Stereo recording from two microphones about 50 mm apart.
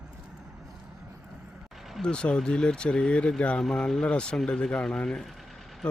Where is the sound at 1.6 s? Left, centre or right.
Centre.